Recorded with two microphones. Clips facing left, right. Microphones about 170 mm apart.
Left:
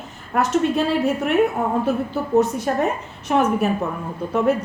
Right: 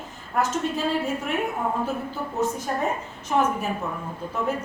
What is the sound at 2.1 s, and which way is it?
A woman's voice, 70° left (ahead or behind).